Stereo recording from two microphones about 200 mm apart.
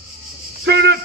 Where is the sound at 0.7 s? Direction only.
55° right (ahead or behind).